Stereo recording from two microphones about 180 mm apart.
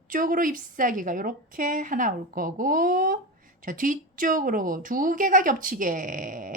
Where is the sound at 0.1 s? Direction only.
50° right (ahead or behind).